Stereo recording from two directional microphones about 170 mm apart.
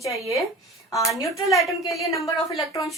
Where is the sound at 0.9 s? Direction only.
20° left (ahead or behind).